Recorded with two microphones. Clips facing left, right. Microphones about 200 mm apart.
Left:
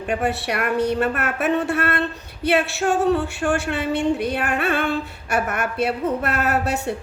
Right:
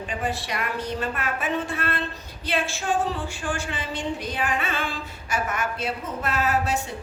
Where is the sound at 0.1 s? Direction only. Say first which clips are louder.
Left 8 dB; 65° left (ahead or behind).